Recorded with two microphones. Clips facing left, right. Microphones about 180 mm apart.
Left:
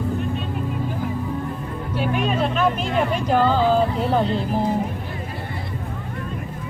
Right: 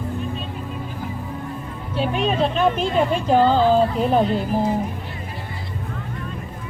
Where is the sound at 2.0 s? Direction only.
25° right (ahead or behind).